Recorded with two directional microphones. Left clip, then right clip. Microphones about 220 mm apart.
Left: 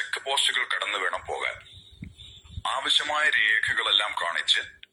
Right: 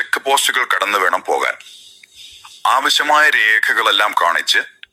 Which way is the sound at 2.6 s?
45° right (ahead or behind).